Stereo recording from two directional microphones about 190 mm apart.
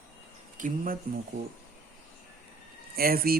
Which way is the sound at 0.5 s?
45° right (ahead or behind).